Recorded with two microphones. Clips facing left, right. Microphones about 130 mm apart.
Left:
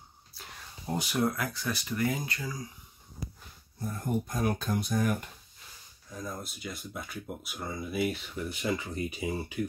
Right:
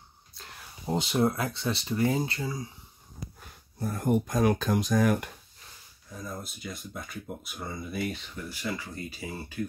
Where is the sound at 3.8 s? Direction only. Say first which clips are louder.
Right 6 dB; 75° right (ahead or behind); by 5.3 s 90° right.